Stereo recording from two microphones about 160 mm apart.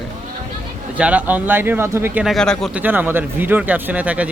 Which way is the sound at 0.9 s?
10° right (ahead or behind).